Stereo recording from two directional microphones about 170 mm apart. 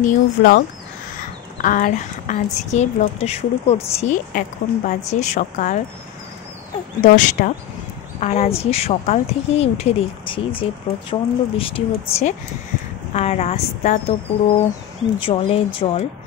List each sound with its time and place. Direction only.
0.0 s speech: 55° left (ahead or behind); by 4.2 s 40° left (ahead or behind)
4.3 s speech: 50° left (ahead or behind)
7.0 s speech: 50° left (ahead or behind)